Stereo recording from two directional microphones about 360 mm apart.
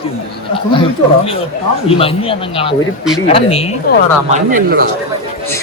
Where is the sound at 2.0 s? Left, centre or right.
Centre.